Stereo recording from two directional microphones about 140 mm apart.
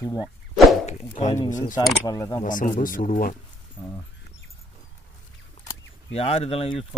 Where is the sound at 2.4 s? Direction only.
70° left (ahead or behind); by 3.3 s 90° left.